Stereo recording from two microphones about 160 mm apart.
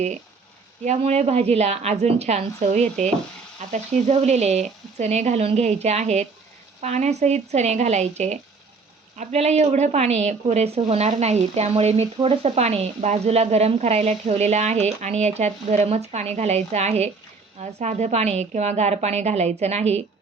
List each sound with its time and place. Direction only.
0.9 s a woman's voice: 40° right (ahead or behind)